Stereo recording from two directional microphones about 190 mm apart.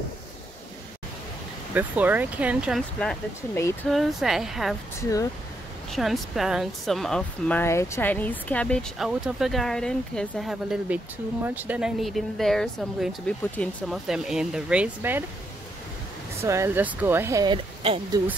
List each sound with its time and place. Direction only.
1.7 s speech: 10° right (ahead or behind)
5.0 s speech: 15° left (ahead or behind)
5.9 s speech: centre (ahead or behind)
16.4 s speech: 15° right (ahead or behind)